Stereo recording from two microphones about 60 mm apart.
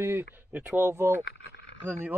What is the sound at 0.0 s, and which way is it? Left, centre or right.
Speech, right.